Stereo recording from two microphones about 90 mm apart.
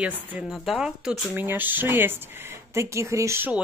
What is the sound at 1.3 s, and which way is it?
Speech, 20° right (ahead or behind).